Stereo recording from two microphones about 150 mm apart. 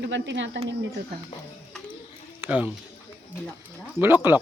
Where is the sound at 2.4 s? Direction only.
10° right (ahead or behind).